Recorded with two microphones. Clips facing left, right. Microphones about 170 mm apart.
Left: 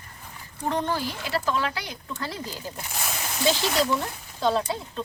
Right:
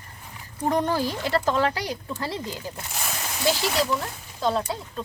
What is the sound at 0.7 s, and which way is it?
Speech, 40° right (ahead or behind).